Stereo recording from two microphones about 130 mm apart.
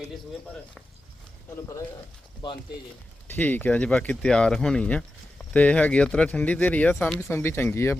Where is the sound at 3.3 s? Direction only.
15° left (ahead or behind).